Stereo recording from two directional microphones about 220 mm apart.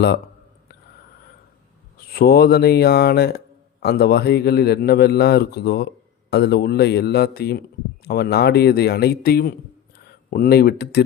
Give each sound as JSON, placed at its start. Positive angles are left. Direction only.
{"t": 2.1, "sound": "speech", "side_deg": 45}